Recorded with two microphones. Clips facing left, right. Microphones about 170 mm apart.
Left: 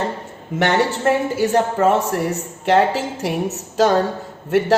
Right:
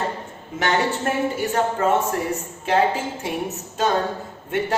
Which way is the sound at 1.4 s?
90° left.